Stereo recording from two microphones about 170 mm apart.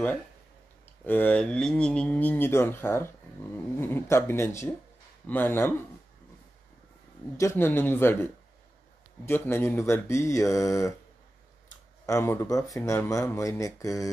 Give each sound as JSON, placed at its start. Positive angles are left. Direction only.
{"t": 1.0, "sound": "speech", "side_deg": 10}
{"t": 7.3, "sound": "speech", "side_deg": 15}
{"t": 12.1, "sound": "speech", "side_deg": 15}